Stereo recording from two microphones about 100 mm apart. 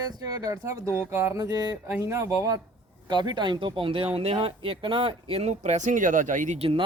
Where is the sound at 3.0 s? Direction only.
50° right (ahead or behind).